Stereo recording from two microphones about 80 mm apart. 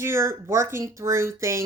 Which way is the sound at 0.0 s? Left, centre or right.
Right.